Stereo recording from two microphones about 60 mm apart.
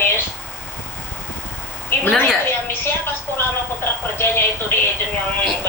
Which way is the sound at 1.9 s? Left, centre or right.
Left.